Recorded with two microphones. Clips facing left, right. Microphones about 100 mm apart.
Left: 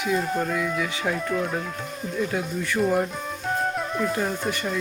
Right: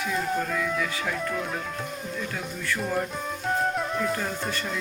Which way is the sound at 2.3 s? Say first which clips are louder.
Left 5 dB; 15° left (ahead or behind).